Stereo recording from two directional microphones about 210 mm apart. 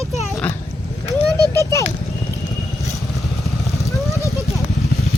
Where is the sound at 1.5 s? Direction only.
15° left (ahead or behind).